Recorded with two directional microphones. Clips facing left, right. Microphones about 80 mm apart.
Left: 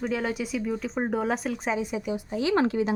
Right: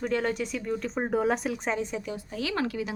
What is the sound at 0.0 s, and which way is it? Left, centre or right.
Speech, centre.